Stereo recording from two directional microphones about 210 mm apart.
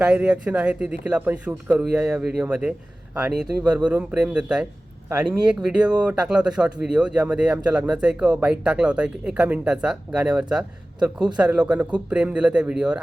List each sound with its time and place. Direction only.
0.0 s speech: 5° right (ahead or behind)
3.6 s speech: 20° right (ahead or behind)
3.8 s speech: 5° right (ahead or behind)
11.0 s speech: 20° right (ahead or behind)
11.3 s speech: 5° right (ahead or behind)